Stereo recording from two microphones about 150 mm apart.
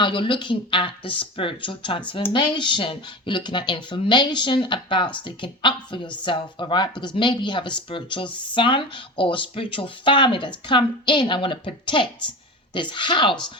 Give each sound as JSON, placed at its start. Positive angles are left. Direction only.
{"t": 0.0, "sound": "speech", "side_deg": 35}